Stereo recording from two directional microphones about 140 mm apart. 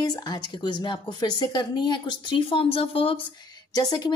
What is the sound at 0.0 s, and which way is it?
Speech, 30° left (ahead or behind).